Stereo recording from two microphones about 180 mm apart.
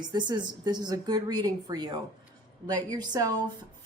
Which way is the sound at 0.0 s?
25° right (ahead or behind).